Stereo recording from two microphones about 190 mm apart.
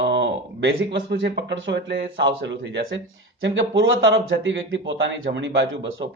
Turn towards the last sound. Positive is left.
turn(degrees=-70)  # may be behind; listen again after turning